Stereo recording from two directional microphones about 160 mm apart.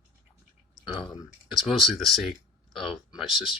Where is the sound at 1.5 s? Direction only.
Centre (ahead or behind).